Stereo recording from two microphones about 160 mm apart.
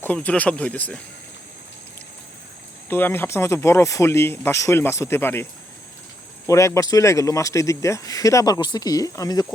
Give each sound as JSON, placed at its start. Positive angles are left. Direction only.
{"t": 0.0, "sound": "speech", "side_deg": 10}
{"t": 2.9, "sound": "speech", "side_deg": 15}
{"t": 6.5, "sound": "speech", "side_deg": 20}